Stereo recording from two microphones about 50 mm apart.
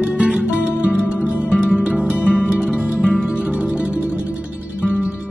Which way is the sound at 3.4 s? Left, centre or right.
Right.